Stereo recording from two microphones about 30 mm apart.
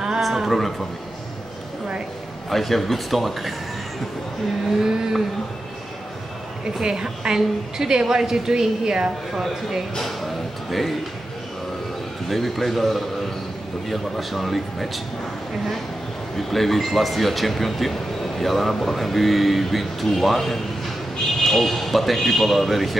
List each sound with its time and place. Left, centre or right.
0.2 s a sound: centre
0.5 s speech: centre
2.5 s speech: centre
4.8 s a woman's voice: centre
6.8 s a woman's voice: right
9.9 s speech: centre
12.3 s speech: centre
16.3 s speech: centre